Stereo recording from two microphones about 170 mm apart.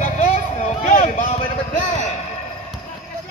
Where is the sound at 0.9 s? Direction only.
55° left (ahead or behind).